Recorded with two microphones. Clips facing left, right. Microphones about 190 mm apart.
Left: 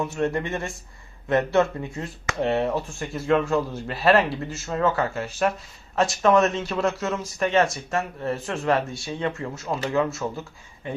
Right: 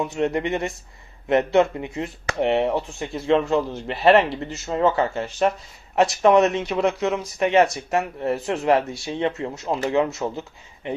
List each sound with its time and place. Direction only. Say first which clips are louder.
0.0 s speech: right 2 dB; 15° right (ahead or behind)